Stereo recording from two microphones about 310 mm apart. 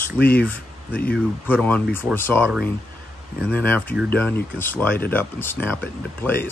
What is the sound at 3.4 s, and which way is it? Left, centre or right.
Speech, centre.